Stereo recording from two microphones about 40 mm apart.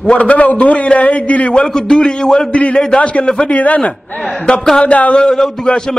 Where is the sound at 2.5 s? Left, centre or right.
Left.